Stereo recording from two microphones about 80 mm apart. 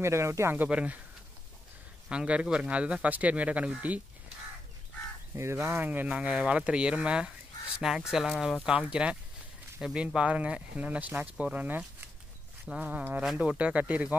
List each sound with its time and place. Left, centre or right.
0.0 s speech: right
0.7 s speech: centre
2.0 s speech: centre
5.3 s speech: right; by 11.8 s centre
12.8 s speech: right